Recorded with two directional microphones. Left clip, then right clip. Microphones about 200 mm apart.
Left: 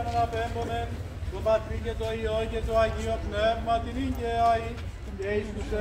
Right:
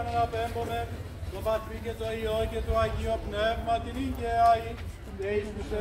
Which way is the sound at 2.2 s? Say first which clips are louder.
Even; 10° right (ahead or behind).